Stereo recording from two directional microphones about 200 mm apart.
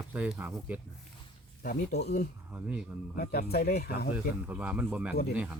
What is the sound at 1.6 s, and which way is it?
Speech, 45° left (ahead or behind).